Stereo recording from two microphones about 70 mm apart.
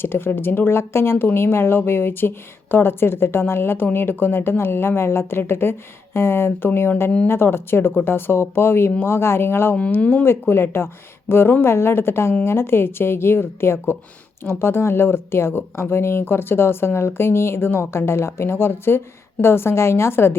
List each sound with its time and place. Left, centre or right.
0.0 s speech: left
9.7 s speech: centre
10.2 s speech: left